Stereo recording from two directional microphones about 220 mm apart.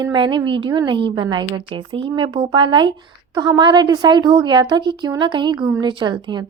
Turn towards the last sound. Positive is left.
turn(degrees=-20)  # may be behind; listen again after turning